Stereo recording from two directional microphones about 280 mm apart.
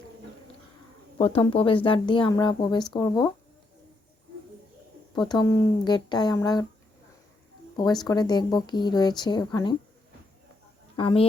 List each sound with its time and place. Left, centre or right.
1.2 s speech: centre
5.1 s speech: centre
8.0 s speech: centre
10.9 s speech: centre